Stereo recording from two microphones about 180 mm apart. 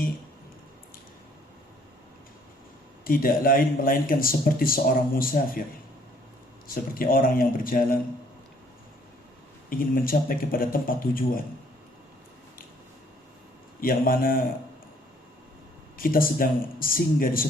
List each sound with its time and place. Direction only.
3.0 s speech: 55° left (ahead or behind)
6.7 s speech: 55° left (ahead or behind)
9.6 s speech: 50° left (ahead or behind)
13.8 s speech: 50° left (ahead or behind)
16.0 s speech: 50° left (ahead or behind)